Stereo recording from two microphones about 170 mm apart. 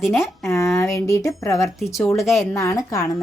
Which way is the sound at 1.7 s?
Centre (ahead or behind).